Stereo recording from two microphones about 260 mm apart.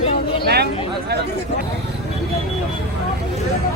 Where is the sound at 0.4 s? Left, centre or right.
Right.